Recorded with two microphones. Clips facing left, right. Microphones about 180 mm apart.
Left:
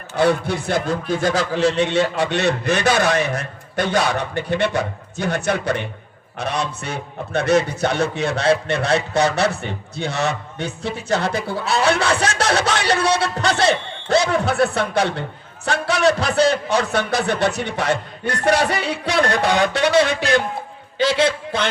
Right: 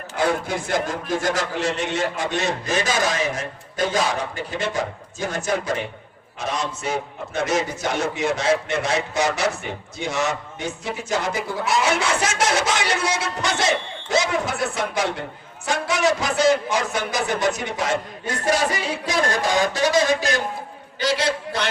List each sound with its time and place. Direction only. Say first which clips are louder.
0.2 s a man's voice: left 4 dB; 70° left (ahead or behind)